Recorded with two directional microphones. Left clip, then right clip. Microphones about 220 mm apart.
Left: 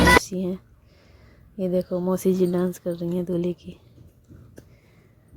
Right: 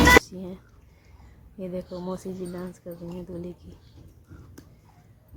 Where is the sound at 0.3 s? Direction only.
30° left (ahead or behind).